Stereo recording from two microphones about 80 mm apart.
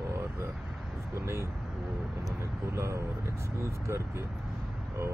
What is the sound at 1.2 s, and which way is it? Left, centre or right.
Speech, right.